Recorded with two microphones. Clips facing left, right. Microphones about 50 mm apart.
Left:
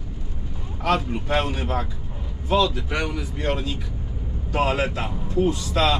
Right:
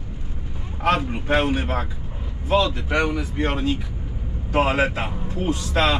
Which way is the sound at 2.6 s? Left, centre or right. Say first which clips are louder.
Right 4 dB; right.